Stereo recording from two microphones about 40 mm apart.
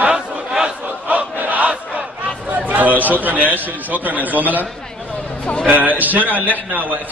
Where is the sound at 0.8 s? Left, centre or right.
Right.